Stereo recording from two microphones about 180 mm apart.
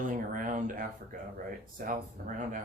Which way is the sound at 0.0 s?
45° right (ahead or behind).